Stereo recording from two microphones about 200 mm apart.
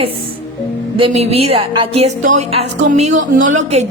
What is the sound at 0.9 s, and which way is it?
A woman's voice, 30° right (ahead or behind).